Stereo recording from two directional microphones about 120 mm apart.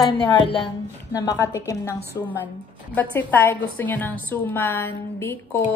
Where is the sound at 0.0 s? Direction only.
35° left (ahead or behind).